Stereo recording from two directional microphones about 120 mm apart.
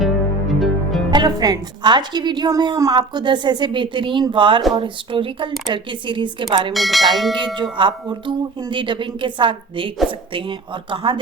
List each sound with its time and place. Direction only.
0.0 s music: centre (ahead or behind)
1.1 s a woman's voice: 35° right (ahead or behind)
6.7 s speech: centre (ahead or behind)
7.3 s speech: 40° right (ahead or behind)